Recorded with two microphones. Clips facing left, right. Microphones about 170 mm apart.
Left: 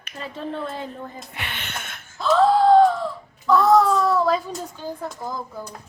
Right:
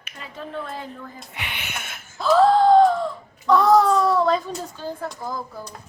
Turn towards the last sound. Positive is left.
turn(degrees=15)  # may be behind; listen again after turning